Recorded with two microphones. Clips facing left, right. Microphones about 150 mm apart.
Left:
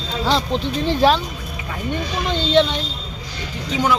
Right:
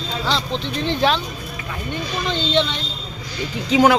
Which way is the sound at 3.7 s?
90° right.